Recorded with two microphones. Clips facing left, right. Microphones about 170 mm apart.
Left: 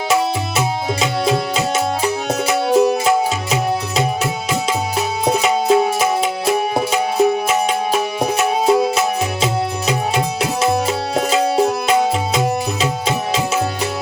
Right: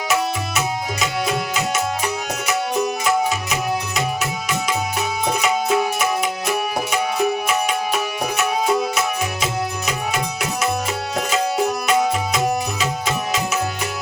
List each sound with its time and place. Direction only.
1.2 s music: 30° left (ahead or behind)
5.2 s music: 30° left (ahead or behind)